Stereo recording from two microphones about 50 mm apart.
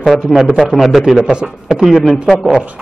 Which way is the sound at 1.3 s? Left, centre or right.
Centre.